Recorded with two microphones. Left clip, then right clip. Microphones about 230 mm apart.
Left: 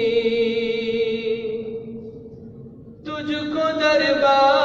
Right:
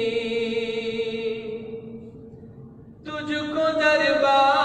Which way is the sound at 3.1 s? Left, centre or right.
Centre.